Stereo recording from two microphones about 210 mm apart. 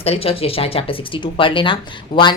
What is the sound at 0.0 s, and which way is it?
Speech, 30° left (ahead or behind).